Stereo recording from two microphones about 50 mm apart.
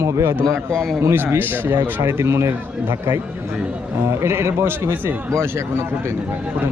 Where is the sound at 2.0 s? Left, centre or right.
Right.